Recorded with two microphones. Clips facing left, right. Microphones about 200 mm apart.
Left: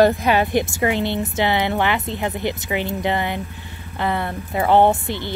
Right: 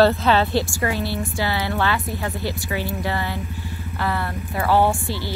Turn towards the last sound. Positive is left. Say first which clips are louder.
# left 3 dB
turn(degrees=20)  # may be behind; listen again after turning